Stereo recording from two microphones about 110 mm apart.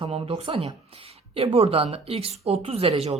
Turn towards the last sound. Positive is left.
turn(degrees=-65)  # may be behind; listen again after turning